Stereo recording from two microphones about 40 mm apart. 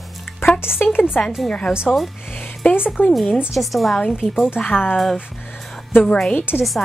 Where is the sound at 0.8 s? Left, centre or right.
Left.